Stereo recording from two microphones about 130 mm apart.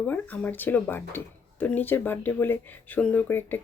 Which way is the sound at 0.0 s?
10° left (ahead or behind).